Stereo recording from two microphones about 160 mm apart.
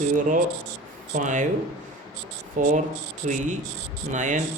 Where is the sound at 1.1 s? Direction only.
50° right (ahead or behind).